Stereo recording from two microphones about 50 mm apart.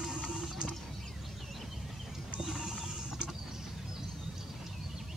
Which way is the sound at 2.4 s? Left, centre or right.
Centre.